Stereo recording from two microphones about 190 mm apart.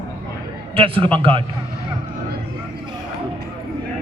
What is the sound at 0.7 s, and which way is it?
Speech, 25° right (ahead or behind).